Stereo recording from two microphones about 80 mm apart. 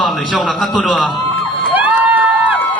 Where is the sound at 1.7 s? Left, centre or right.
Right.